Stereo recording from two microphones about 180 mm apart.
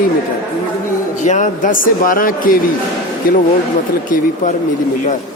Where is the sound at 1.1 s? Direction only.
40° left (ahead or behind).